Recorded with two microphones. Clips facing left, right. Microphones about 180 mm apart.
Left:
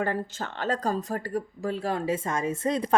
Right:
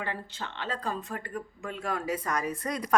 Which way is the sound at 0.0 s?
45° left (ahead or behind).